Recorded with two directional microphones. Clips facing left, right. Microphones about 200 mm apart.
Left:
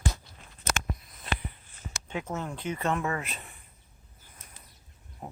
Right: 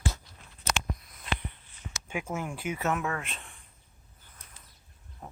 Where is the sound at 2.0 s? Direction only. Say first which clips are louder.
Even; 10° right (ahead or behind).